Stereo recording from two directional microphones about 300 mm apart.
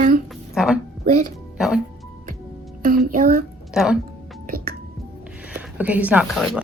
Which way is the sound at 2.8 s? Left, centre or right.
Right.